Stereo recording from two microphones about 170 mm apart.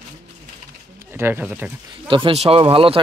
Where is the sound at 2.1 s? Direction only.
30° right (ahead or behind).